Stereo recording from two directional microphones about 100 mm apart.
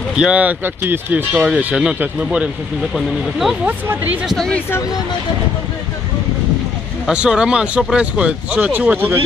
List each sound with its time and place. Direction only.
0.1 s speech: 10° right (ahead or behind)
3.6 s speech: 20° right (ahead or behind)
4.3 s speech: 5° left (ahead or behind)
7.1 s speech: 10° right (ahead or behind)